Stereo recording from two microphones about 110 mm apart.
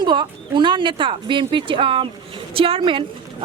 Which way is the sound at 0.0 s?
45° right (ahead or behind).